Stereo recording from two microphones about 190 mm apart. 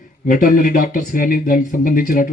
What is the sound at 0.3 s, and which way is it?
Speech, 45° left (ahead or behind).